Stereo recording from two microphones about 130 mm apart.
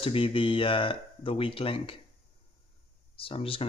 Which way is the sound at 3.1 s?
45° left (ahead or behind).